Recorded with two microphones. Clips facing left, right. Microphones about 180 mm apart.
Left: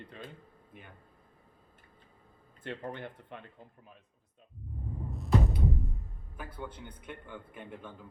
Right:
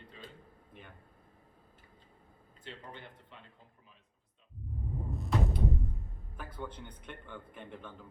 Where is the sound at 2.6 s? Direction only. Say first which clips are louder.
Left 9 dB; 55° left (ahead or behind).